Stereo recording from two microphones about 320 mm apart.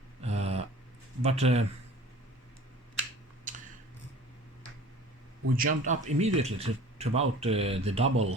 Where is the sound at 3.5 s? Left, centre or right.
Right.